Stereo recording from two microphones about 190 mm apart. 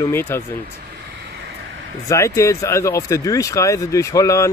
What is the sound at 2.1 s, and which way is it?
Mantra, 15° left (ahead or behind).